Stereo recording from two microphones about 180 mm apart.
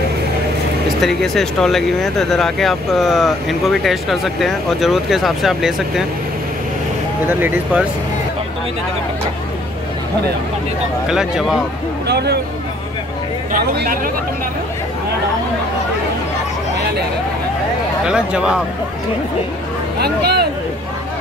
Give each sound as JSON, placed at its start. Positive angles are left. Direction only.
{"t": 1.0, "sound": "speech", "side_deg": 0}
{"t": 7.2, "sound": "speech", "side_deg": -10}
{"t": 11.1, "sound": "speech", "side_deg": -5}
{"t": 12.1, "sound": "speech", "side_deg": -65}
{"t": 13.7, "sound": "speech", "side_deg": -50}
{"t": 18.0, "sound": "speech", "side_deg": -5}
{"t": 20.0, "sound": "speech", "side_deg": -65}